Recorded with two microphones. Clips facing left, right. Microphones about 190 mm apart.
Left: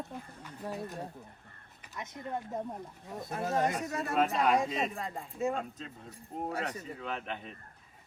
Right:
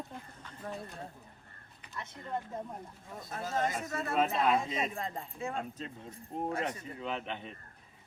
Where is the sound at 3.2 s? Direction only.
20° left (ahead or behind).